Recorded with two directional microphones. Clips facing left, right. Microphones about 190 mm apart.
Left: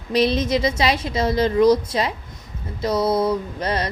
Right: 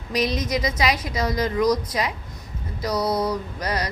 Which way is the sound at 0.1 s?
30° left (ahead or behind).